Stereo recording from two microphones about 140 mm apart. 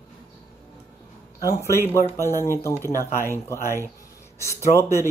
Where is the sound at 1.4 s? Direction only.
20° left (ahead or behind).